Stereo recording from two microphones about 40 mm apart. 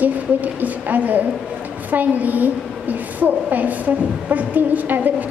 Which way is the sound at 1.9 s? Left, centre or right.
Right.